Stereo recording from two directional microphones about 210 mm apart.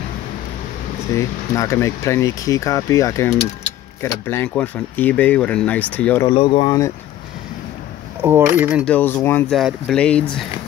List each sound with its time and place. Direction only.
1.1 s speech: 15° left (ahead or behind)
6.2 s speech: 25° left (ahead or behind)
8.2 s speech: 10° right (ahead or behind)
8.8 s speech: 5° left (ahead or behind)